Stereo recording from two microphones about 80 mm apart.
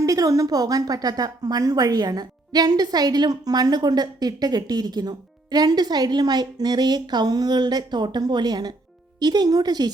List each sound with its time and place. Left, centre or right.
0.0 s a woman's voice: right